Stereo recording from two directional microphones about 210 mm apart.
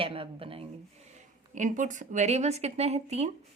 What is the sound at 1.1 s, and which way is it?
Speech, 35° right (ahead or behind).